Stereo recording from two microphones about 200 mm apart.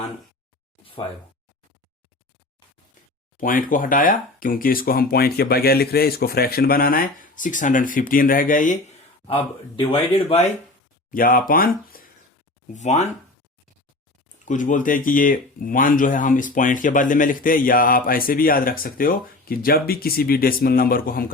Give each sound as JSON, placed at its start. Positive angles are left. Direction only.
{"t": 3.4, "sound": "speech", "side_deg": 45}
{"t": 9.2, "sound": "speech", "side_deg": 25}
{"t": 11.1, "sound": "speech", "side_deg": 45}
{"t": 12.7, "sound": "speech", "side_deg": 35}
{"t": 14.4, "sound": "speech", "side_deg": 40}